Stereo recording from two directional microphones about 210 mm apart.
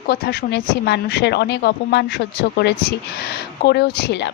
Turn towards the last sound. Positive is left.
turn(degrees=55)  # may be behind; listen again after turning